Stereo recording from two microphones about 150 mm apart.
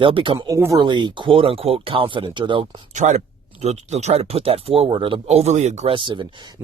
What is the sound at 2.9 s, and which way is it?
Speech, 50° right (ahead or behind).